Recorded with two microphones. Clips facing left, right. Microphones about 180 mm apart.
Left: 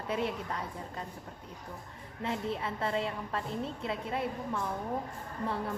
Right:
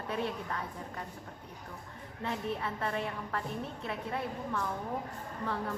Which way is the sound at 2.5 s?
20° left (ahead or behind).